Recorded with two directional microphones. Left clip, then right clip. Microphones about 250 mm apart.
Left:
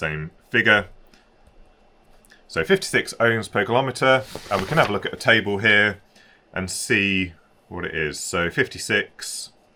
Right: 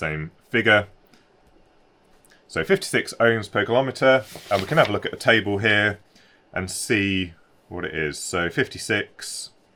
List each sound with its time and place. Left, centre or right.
0.0 s speech: right
2.5 s speech: right